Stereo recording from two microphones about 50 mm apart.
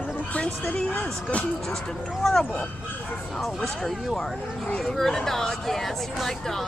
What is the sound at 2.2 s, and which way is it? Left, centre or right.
Speech, centre.